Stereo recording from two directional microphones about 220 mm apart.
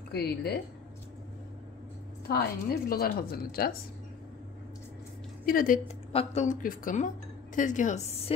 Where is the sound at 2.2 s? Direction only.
45° left (ahead or behind).